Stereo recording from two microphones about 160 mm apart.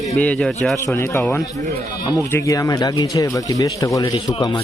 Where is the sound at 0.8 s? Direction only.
15° left (ahead or behind).